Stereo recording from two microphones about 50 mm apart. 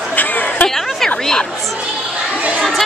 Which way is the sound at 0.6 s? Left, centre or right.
Centre.